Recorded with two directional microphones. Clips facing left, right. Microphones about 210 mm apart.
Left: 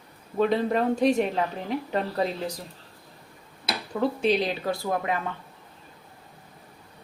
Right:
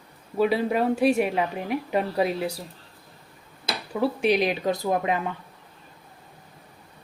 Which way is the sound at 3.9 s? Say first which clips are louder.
Right 1 dB; 10° right (ahead or behind).